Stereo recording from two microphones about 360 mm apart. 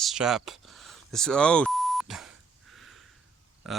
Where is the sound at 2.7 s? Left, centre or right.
Centre.